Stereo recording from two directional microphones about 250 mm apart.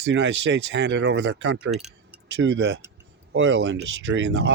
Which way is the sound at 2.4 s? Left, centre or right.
Right.